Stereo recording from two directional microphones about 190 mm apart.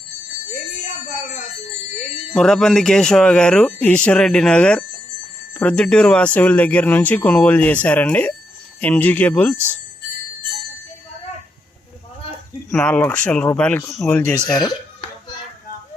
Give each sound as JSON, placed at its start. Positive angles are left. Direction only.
{"t": 2.3, "sound": "speech", "side_deg": 5}
{"t": 12.7, "sound": "speech", "side_deg": 5}
{"t": 14.6, "sound": "a sound", "side_deg": 20}